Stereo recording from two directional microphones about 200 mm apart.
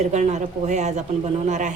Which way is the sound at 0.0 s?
35° right (ahead or behind).